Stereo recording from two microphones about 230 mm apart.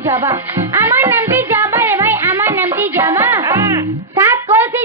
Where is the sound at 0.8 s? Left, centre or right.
Centre.